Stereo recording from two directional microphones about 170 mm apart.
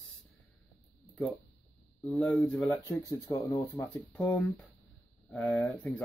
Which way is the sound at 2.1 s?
5° left (ahead or behind).